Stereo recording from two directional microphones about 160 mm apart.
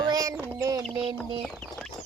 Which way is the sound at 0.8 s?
30° right (ahead or behind).